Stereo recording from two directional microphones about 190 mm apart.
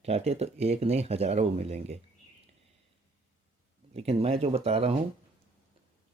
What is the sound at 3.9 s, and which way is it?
Speech, 30° right (ahead or behind).